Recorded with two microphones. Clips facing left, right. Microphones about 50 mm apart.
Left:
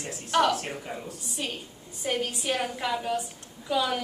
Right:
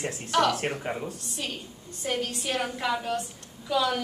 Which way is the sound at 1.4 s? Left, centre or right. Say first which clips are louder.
Left 1 dB; centre.